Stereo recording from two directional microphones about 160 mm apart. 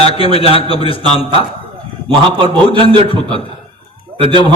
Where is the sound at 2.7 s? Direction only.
30° right (ahead or behind).